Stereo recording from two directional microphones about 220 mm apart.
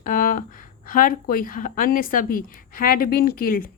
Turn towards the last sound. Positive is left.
turn(degrees=40)  # may be behind; listen again after turning